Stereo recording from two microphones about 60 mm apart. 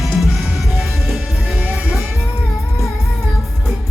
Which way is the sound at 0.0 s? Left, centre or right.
Centre.